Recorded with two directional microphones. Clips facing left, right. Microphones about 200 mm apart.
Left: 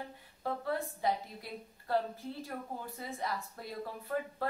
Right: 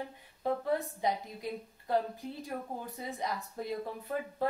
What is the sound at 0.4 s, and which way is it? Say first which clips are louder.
A woman's voice: right 4 dB; 20° right (ahead or behind).